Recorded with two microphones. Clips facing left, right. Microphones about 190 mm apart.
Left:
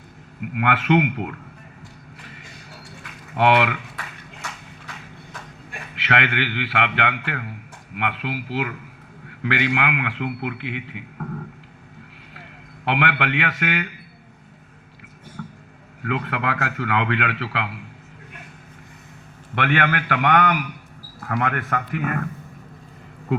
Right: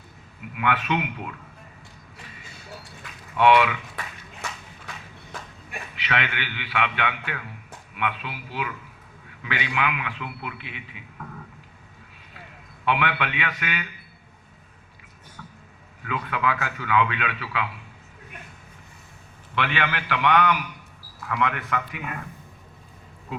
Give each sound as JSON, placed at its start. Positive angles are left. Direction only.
{"t": 0.5, "sound": "a man's voice", "side_deg": 60}
{"t": 3.3, "sound": "a man's voice", "side_deg": 60}
{"t": 5.9, "sound": "a man's voice", "side_deg": 60}
{"t": 12.8, "sound": "a man's voice", "side_deg": 60}
{"t": 15.4, "sound": "a sound", "side_deg": 50}
{"t": 16.0, "sound": "a man's voice", "side_deg": 60}
{"t": 19.5, "sound": "a man's voice", "side_deg": 55}